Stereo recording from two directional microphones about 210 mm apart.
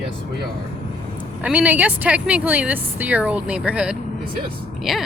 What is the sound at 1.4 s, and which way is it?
Speech, 5° right (ahead or behind).